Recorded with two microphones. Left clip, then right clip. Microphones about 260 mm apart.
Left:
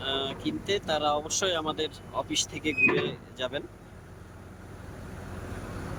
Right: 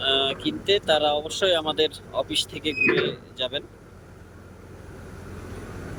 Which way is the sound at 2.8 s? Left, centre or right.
Centre.